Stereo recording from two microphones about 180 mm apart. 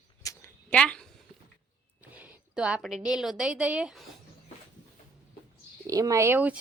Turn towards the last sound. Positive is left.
turn(degrees=-10)  # may be behind; listen again after turning